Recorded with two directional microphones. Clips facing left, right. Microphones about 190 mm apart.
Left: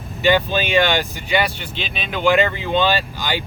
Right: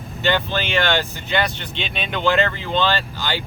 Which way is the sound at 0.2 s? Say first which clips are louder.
Left 4 dB; 15° left (ahead or behind).